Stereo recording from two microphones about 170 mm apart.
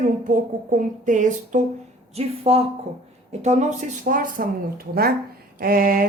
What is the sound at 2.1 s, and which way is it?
A woman's voice, 35° right (ahead or behind).